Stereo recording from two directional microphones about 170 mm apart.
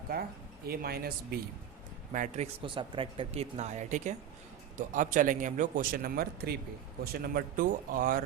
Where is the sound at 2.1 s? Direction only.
45° right (ahead or behind).